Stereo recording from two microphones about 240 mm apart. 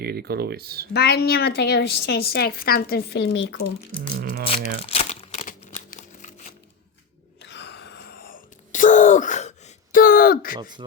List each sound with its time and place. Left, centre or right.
0.0 s speech: right
0.9 s a woman's voice: left
4.1 s speech: right
4.8 s crumpling: left
6.0 s a sound: left
7.4 s whispering: left